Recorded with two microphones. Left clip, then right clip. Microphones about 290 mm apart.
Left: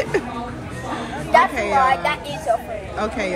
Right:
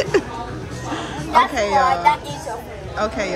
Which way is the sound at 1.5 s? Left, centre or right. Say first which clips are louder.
Even; centre.